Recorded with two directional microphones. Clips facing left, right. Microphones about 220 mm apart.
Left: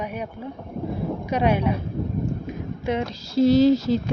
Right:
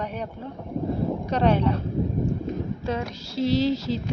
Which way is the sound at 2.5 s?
15° left (ahead or behind).